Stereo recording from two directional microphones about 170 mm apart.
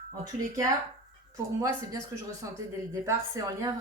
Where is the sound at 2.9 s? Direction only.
20° right (ahead or behind).